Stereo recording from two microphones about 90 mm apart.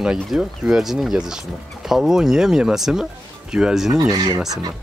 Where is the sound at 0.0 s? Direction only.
5° right (ahead or behind).